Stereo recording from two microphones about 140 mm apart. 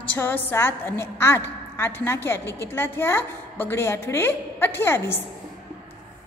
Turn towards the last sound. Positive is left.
turn(degrees=15)  # may be behind; listen again after turning